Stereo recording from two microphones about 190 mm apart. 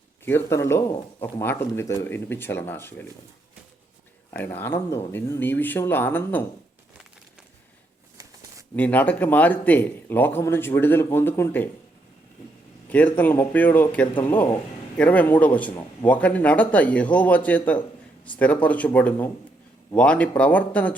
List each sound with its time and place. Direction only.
0.3 s a man's voice: 15° left (ahead or behind)
4.4 s a man's voice: 10° left (ahead or behind)
8.2 s a sound: 15° right (ahead or behind)
8.7 s a man's voice: 10° left (ahead or behind)
12.9 s a man's voice: 10° left (ahead or behind)